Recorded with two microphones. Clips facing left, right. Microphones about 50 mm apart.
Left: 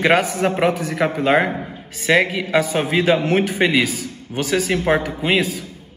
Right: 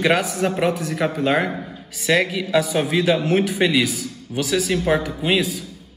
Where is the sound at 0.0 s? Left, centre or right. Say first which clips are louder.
Left 3 dB; left.